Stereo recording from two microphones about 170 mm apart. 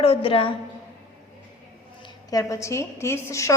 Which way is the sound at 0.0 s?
30° left (ahead or behind).